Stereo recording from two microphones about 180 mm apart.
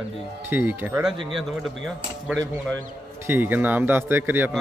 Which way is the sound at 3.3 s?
10° right (ahead or behind).